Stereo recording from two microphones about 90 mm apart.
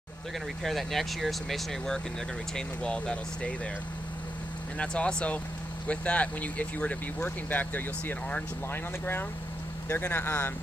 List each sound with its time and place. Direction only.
0.7 s speech: centre (ahead or behind)
4.7 s speech: 10° left (ahead or behind)
9.8 s speech: 25° left (ahead or behind)